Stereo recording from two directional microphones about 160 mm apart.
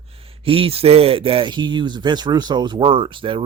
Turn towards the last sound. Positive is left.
turn(degrees=-30)  # may be behind; listen again after turning